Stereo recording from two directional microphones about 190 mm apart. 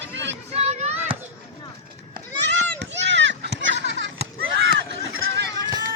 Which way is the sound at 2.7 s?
70° right (ahead or behind).